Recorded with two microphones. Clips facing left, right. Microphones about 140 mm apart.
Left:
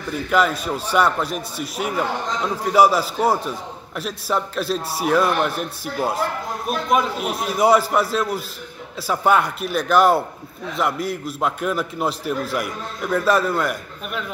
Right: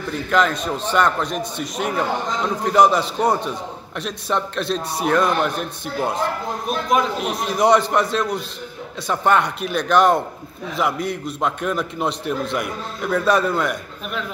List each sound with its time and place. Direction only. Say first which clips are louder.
0.3 s a man's voice: even; 5° left (ahead or behind)